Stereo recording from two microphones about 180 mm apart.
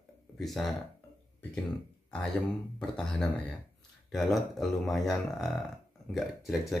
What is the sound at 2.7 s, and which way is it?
Speech, 5° left (ahead or behind).